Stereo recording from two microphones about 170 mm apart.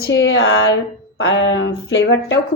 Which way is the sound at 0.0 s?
90° left.